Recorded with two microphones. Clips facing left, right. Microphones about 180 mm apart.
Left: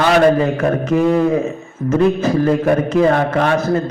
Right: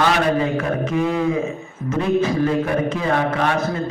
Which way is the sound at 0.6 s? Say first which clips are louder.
Left 5 dB; 45° left (ahead or behind).